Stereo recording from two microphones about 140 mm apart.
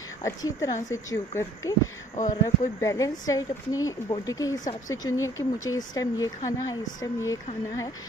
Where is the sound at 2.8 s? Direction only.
20° left (ahead or behind).